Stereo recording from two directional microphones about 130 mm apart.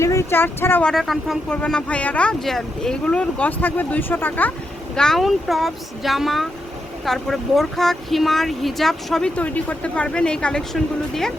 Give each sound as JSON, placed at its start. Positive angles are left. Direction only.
{"t": 0.0, "sound": "speech", "side_deg": 20}
{"t": 0.9, "sound": "speech", "side_deg": 0}
{"t": 4.9, "sound": "speech", "side_deg": 0}